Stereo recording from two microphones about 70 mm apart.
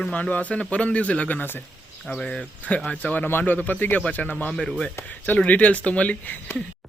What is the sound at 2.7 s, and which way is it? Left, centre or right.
A man's voice, left.